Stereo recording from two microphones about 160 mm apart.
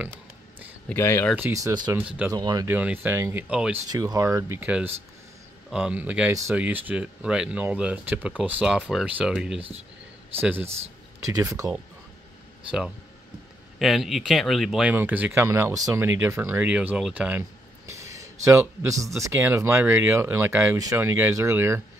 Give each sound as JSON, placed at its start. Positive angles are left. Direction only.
{"t": 0.8, "sound": "speech", "side_deg": 15}
{"t": 1.3, "sound": "speech", "side_deg": -15}
{"t": 2.0, "sound": "speech", "side_deg": -10}
{"t": 2.3, "sound": "speech", "side_deg": -25}
{"t": 2.7, "sound": "speech", "side_deg": -10}
{"t": 3.9, "sound": "speech", "side_deg": -20}
{"t": 13.7, "sound": "speech", "side_deg": 0}
{"t": 17.8, "sound": "speech", "side_deg": -20}